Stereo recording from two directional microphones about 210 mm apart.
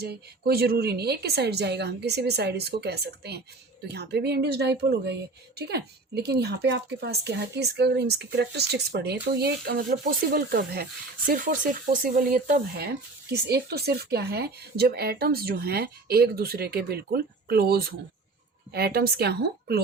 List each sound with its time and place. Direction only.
0.0 s speech: 50° right (ahead or behind)